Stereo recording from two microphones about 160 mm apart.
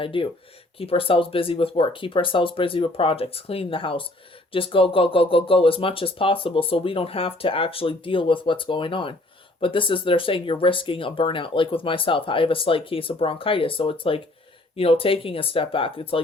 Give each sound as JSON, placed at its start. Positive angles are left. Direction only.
{"t": 0.0, "sound": "speech", "side_deg": 30}